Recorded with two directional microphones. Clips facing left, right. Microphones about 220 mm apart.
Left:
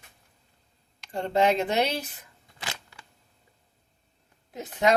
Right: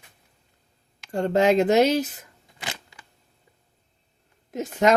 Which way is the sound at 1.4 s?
90° right.